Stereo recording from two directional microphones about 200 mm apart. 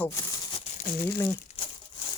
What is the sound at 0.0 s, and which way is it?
Crumpling, 15° left (ahead or behind).